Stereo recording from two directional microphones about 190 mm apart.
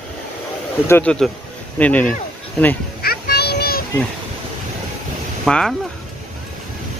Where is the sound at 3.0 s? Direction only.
55° left (ahead or behind).